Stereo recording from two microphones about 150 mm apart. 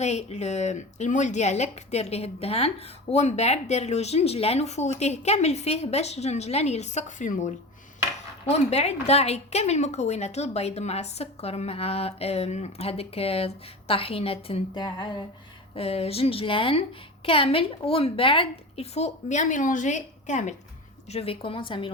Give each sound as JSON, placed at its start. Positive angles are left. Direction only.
{"t": 0.0, "sound": "speech", "side_deg": 45}
{"t": 14.8, "sound": "a sound", "side_deg": 30}
{"t": 15.7, "sound": "speech", "side_deg": 40}
{"t": 21.1, "sound": "speech", "side_deg": 40}